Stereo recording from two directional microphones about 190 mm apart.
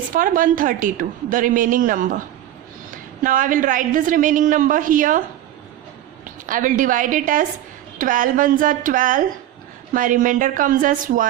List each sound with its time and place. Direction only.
0.1 s a woman's voice: 45° right (ahead or behind)
6.4 s a woman's voice: 45° right (ahead or behind)